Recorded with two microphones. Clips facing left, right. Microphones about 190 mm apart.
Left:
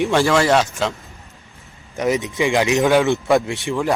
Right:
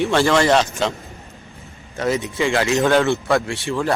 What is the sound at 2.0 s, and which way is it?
Speech, 15° left (ahead or behind).